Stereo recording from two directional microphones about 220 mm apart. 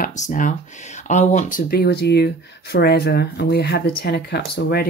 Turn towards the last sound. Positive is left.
turn(degrees=45)  # may be behind; listen again after turning